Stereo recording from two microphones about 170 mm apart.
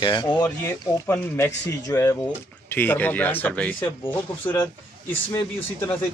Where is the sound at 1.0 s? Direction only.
15° left (ahead or behind).